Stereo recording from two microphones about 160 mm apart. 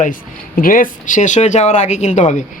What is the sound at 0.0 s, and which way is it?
Speech, 60° left (ahead or behind).